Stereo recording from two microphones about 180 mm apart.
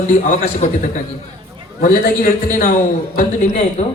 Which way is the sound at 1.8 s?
55° left (ahead or behind).